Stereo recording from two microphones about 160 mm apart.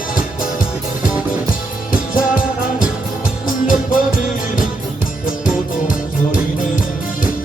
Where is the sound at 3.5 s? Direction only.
60° left (ahead or behind).